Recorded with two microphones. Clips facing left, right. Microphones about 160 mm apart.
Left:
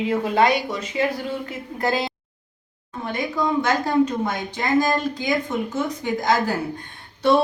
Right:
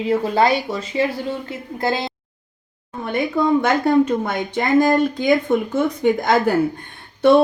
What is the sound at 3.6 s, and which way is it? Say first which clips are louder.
Speech: right 4 dB; 55° right (ahead or behind).